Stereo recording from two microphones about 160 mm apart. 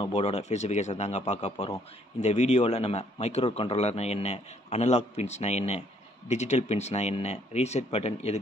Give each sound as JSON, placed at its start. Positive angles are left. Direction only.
{"t": 0.0, "sound": "a man's voice", "side_deg": 40}